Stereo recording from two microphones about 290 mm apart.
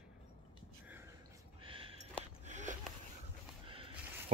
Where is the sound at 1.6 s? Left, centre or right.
Centre.